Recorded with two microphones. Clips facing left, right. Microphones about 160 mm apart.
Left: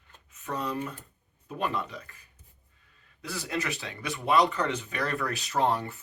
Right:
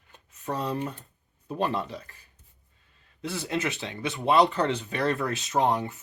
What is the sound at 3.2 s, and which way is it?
Speech, 25° right (ahead or behind).